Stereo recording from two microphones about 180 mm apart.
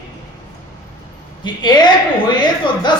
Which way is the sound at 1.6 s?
25° left (ahead or behind).